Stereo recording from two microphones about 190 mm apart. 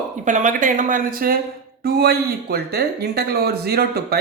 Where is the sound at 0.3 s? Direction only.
40° right (ahead or behind).